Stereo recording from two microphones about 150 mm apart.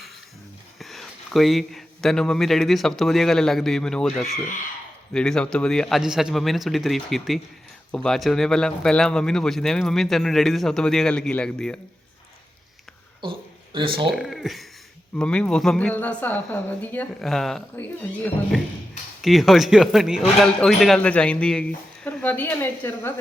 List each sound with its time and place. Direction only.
0.8 s a man's voice: centre (ahead or behind)
13.7 s speech: 35° right (ahead or behind)
14.1 s a man's voice: centre (ahead or behind)
19.2 s a man's voice: centre (ahead or behind)